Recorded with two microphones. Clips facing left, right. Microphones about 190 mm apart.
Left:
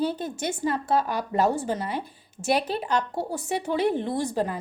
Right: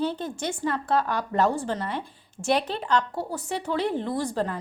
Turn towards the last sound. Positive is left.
turn(degrees=10)  # may be behind; listen again after turning